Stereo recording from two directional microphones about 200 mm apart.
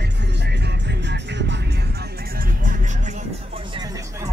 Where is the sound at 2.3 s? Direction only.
45° right (ahead or behind).